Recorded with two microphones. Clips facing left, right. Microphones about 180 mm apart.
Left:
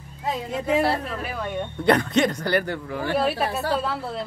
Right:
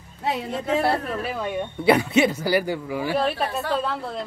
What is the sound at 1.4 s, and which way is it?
Speech, 10° right (ahead or behind).